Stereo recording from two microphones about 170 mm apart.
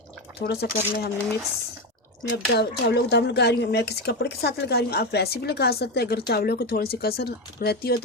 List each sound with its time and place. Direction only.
0.3 s speech: 75° left (ahead or behind)
2.3 s speech: 70° left (ahead or behind)